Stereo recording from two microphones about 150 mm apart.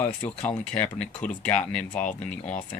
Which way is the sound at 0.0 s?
10° left (ahead or behind).